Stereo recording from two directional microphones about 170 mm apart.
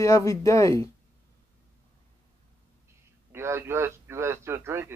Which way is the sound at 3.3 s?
15° right (ahead or behind).